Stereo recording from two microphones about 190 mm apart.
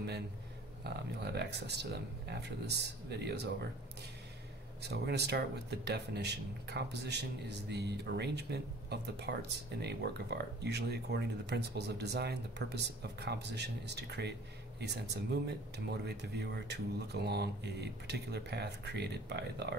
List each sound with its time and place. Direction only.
0.8 s speech: 60° right (ahead or behind)
4.8 s speech: 60° right (ahead or behind)